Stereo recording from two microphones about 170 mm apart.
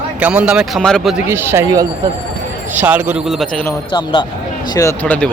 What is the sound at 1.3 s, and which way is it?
A man's voice, 15° right (ahead or behind).